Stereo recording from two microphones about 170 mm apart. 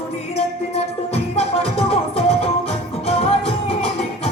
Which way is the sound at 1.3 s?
35° left (ahead or behind).